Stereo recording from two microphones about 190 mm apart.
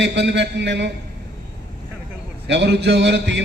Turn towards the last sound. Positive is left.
turn(degrees=-70)  # may be behind; listen again after turning